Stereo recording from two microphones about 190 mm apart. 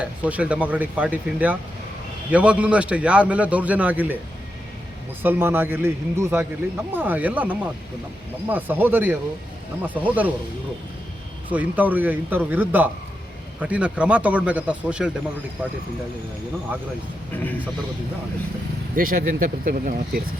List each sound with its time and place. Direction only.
0.0 s speech: 10° right (ahead or behind)
5.2 s speech: 10° right (ahead or behind)
11.5 s speech: 10° right (ahead or behind)
17.3 s a man's voice: 10° left (ahead or behind)
18.9 s speech: 45° right (ahead or behind)